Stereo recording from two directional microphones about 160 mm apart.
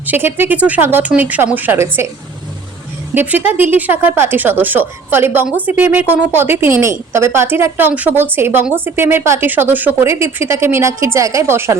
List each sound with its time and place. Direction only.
0.0 s a woman's voice: 10° right (ahead or behind)
3.2 s a woman's voice: 10° right (ahead or behind)